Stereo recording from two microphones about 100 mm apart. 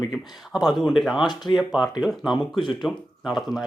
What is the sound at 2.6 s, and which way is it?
Speech, 50° left (ahead or behind).